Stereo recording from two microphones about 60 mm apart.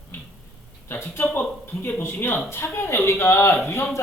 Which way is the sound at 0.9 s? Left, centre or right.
Left.